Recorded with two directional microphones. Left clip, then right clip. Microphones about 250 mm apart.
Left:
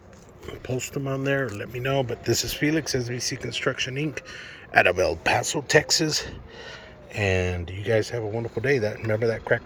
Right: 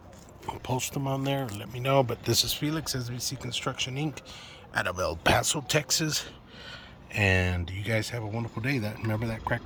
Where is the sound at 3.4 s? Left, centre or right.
Right.